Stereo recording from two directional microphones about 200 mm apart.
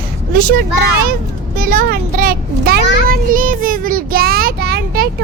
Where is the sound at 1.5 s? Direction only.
45° right (ahead or behind).